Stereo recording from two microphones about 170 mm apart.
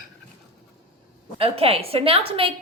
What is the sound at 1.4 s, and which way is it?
A woman's voice, 35° right (ahead or behind).